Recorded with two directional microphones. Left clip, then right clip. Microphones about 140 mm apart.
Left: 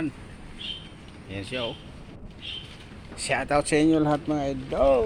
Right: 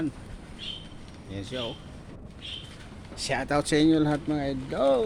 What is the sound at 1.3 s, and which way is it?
Speech, 10° right (ahead or behind).